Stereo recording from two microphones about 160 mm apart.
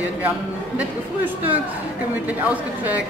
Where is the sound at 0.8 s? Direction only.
10° right (ahead or behind).